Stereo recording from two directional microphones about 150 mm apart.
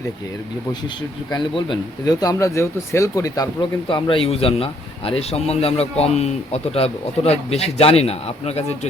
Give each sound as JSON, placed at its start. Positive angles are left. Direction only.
{"t": 1.3, "sound": "speech", "side_deg": 30}